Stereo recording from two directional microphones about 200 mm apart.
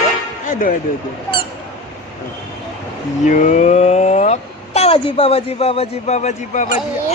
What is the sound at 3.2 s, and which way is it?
Speech, 40° left (ahead or behind).